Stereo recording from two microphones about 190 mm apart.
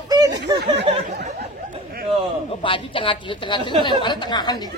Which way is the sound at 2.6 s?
25° left (ahead or behind).